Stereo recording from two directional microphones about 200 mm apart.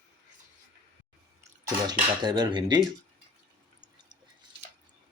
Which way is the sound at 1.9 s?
20° right (ahead or behind).